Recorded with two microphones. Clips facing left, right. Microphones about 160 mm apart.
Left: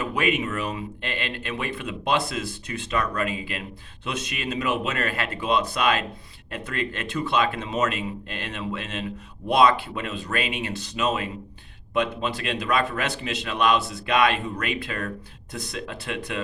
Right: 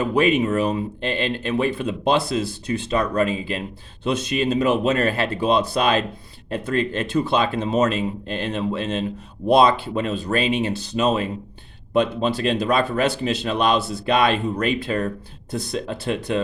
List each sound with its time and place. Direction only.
0.0 s speech: 30° right (ahead or behind)